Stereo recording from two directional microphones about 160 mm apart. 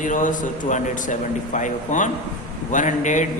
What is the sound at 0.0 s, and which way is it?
A man's voice, 55° left (ahead or behind).